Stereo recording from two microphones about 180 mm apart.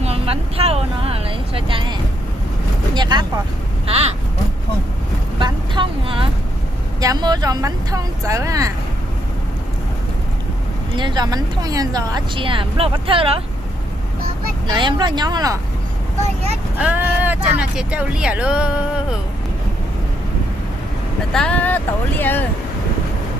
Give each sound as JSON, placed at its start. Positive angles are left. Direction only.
{"t": 0.0, "sound": "vehicle", "side_deg": -35}
{"t": 5.4, "sound": "vehicle", "side_deg": -25}
{"t": 7.0, "sound": "speech", "side_deg": -20}
{"t": 10.9, "sound": "speech", "side_deg": -25}
{"t": 14.7, "sound": "speech", "side_deg": -25}
{"t": 16.7, "sound": "speech", "side_deg": -10}
{"t": 21.3, "sound": "speech", "side_deg": 5}